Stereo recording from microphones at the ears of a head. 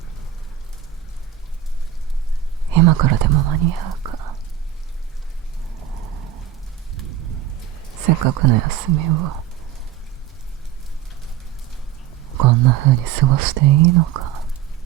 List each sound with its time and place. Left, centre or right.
2.6 s speech: right
5.6 s rain: right
8.0 s speech: right
12.3 s speech: right